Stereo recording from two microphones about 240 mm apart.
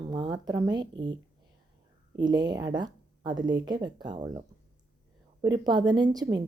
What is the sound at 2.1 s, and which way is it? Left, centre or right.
A woman's voice, centre.